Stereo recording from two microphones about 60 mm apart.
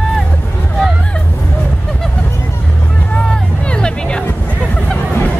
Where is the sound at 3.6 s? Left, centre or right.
Centre.